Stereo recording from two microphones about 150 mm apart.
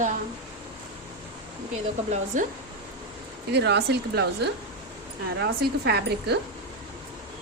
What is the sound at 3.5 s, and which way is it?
Speech, 90° right.